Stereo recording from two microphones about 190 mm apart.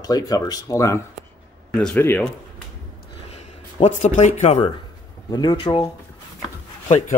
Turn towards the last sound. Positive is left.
turn(degrees=35)  # may be behind; listen again after turning